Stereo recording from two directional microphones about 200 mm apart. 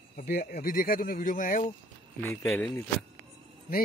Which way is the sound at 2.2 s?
10° left (ahead or behind).